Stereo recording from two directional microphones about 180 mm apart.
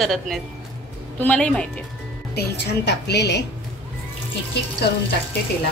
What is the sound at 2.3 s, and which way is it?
A woman's voice, 70° left (ahead or behind).